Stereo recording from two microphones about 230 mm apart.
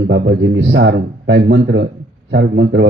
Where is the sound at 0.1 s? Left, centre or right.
Right.